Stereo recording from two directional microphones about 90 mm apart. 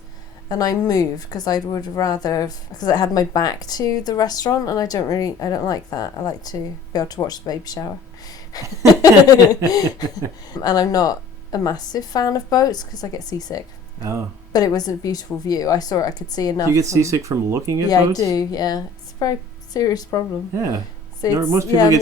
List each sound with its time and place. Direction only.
0.4 s a woman's voice: 45° left (ahead or behind)
14.0 s speech: 35° right (ahead or behind)
14.5 s speech: 45° left (ahead or behind)
16.7 s speech: 35° right (ahead or behind)
17.8 s speech: 45° left (ahead or behind)
20.6 s speech: 40° right (ahead or behind)
21.4 s a woman's voice: 30° right (ahead or behind)